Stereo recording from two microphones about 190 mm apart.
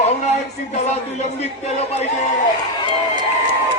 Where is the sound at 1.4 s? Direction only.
35° left (ahead or behind).